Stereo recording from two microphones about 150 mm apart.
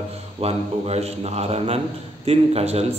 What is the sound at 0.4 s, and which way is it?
A man's voice, 45° right (ahead or behind).